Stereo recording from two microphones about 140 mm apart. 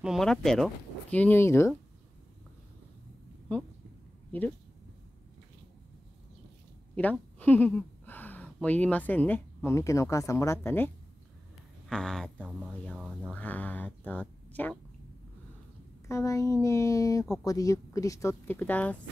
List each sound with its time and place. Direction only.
0.0 s speech: centre (ahead or behind)
1.1 s speech: 15° left (ahead or behind)
7.0 s speech: 10° left (ahead or behind)
11.9 s speech: 5° left (ahead or behind)
12.4 s speech: 10° right (ahead or behind)
13.3 s speech: 10° left (ahead or behind)
16.1 s speech: 20° left (ahead or behind)